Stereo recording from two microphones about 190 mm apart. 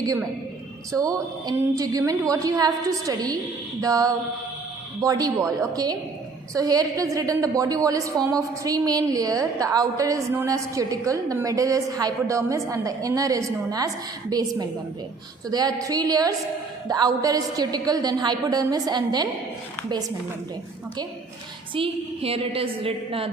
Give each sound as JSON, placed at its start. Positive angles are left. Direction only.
{"t": 0.0, "sound": "a woman's voice", "side_deg": -20}
{"t": 21.8, "sound": "a woman's voice", "side_deg": -30}